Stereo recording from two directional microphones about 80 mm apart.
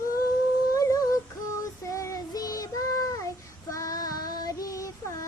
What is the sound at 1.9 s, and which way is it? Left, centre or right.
Child singing, left.